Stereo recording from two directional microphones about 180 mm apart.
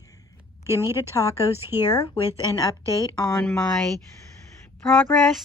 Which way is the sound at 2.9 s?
15° left (ahead or behind).